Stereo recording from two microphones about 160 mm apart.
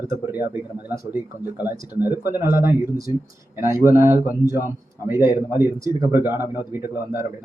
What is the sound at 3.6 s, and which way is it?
Speech, 20° right (ahead or behind).